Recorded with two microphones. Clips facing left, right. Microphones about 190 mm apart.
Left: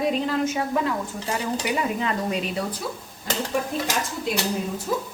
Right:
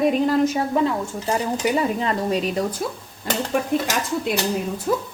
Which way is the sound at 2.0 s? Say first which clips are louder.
Right 3 dB; 35° right (ahead or behind).